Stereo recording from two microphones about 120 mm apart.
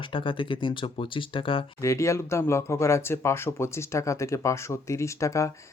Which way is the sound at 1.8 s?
25° left (ahead or behind).